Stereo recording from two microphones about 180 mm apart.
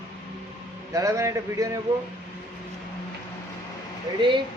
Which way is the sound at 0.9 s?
15° right (ahead or behind).